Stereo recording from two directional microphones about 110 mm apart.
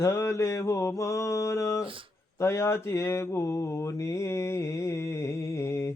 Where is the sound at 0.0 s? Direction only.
25° left (ahead or behind).